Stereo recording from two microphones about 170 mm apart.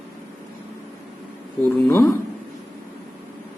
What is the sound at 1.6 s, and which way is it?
Speech, 15° left (ahead or behind).